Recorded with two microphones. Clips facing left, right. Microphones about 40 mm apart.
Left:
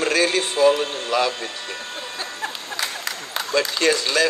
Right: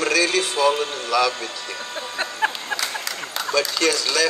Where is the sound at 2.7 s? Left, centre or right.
Left.